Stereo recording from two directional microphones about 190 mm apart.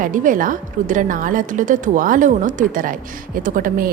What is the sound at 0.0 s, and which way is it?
A woman's voice, 45° right (ahead or behind).